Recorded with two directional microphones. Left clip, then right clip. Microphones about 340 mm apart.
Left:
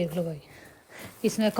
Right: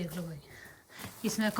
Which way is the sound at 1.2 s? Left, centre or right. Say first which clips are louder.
Left 7 dB; centre.